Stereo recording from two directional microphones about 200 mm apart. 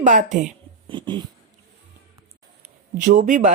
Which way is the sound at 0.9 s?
25° right (ahead or behind).